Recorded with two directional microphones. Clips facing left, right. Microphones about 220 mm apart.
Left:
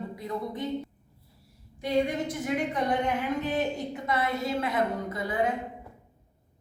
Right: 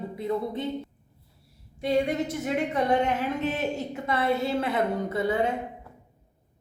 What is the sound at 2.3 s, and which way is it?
Speech, 25° right (ahead or behind).